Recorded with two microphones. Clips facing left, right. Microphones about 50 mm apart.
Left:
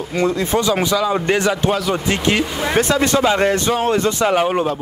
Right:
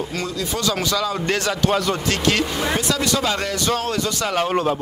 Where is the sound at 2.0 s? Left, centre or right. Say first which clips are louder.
Left 2 dB; centre.